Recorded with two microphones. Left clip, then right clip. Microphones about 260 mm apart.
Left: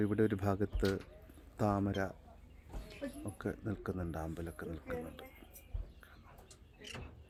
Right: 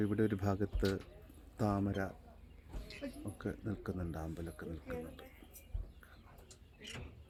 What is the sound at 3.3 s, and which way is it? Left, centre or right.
Speech, centre.